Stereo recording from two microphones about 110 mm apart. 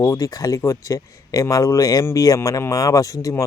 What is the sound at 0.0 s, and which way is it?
Speech, 35° left (ahead or behind).